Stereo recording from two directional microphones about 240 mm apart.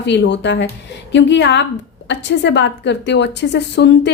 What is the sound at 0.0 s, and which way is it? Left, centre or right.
A woman's voice, left.